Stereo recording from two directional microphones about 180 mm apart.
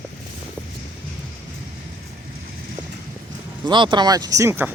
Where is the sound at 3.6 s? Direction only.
25° right (ahead or behind).